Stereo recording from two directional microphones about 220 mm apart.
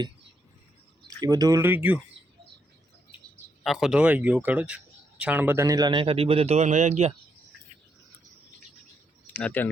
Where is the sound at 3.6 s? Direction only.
Centre (ahead or behind); by 7.1 s 30° right (ahead or behind).